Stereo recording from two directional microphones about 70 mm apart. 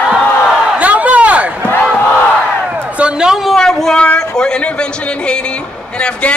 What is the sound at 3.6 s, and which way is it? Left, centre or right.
Speech, centre.